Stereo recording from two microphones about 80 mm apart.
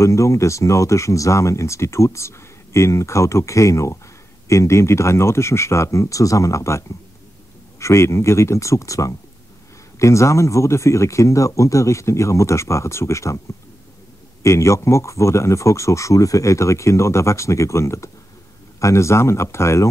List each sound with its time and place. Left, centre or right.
0.0 s speech: left
7.8 s speech: left
14.4 s speech: left